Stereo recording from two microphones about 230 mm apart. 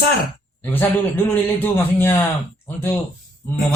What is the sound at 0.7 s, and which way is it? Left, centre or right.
A man's voice, centre.